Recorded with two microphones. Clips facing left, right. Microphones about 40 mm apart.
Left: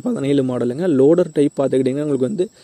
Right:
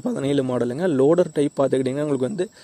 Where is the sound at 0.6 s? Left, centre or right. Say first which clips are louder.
Left 4 dB; centre.